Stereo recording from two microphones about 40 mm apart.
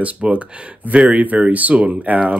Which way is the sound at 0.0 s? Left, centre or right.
Right.